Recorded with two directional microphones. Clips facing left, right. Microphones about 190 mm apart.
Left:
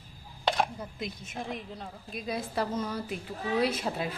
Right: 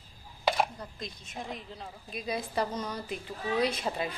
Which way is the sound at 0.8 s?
5° left (ahead or behind).